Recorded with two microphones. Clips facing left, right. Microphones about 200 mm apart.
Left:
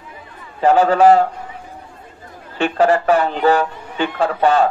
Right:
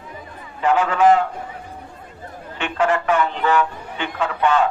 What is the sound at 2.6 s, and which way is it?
A man's voice, 35° left (ahead or behind).